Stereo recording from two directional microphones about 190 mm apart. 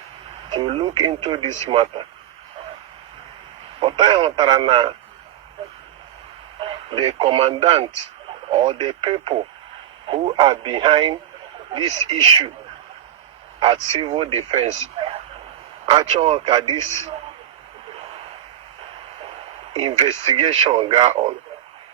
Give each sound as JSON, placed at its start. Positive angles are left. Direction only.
{"t": 0.5, "sound": "speech", "side_deg": -25}
{"t": 3.8, "sound": "speech", "side_deg": -30}
{"t": 6.6, "sound": "speech", "side_deg": -30}
{"t": 13.6, "sound": "speech", "side_deg": -30}
{"t": 15.9, "sound": "speech", "side_deg": -30}
{"t": 19.7, "sound": "speech", "side_deg": -35}